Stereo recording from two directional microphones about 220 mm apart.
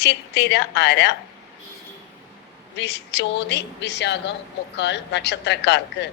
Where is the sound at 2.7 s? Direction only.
50° left (ahead or behind).